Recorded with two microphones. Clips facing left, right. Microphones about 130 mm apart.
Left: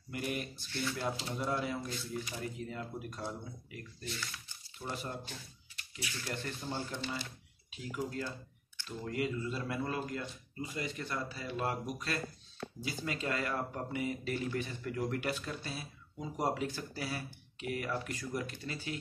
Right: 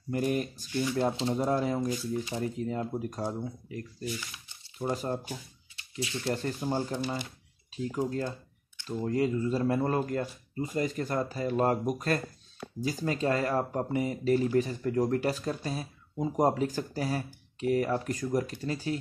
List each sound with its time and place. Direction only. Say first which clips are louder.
0.1 s speech: right 9 dB; 40° right (ahead or behind)
0.7 s speech: right 9 dB; 15° right (ahead or behind)
1.0 s speech: right 8 dB; 35° right (ahead or behind)
2.2 s speech: right 8 dB; 25° right (ahead or behind)
2.6 s speech: right 9 dB; 35° right (ahead or behind)
4.0 s speech: right 6 dB; 10° right (ahead or behind)
4.8 s speech: right 9 dB; 40° right (ahead or behind)
5.9 s speech: right 10 dB; 25° right (ahead or behind)
6.6 s speech: right 8 dB; 45° right (ahead or behind)